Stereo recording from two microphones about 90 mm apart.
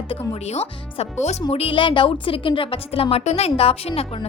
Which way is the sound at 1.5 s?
90° left.